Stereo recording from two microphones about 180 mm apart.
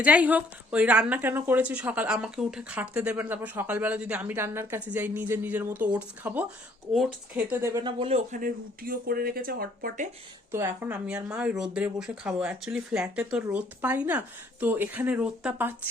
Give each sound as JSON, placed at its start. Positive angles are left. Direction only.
{"t": 0.0, "sound": "a woman's voice", "side_deg": -10}
{"t": 10.5, "sound": "a woman's voice", "side_deg": -15}